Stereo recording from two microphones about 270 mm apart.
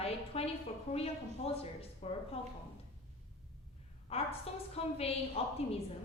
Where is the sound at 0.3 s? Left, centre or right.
Left.